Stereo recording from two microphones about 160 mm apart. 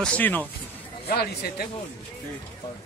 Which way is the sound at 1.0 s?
75° left (ahead or behind).